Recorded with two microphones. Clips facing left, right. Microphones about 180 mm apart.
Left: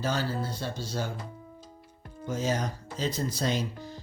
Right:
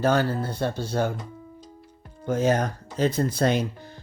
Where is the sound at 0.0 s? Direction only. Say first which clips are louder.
Right 8 dB; 60° right (ahead or behind).